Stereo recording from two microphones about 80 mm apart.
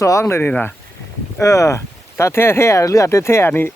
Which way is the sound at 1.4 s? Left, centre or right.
Left.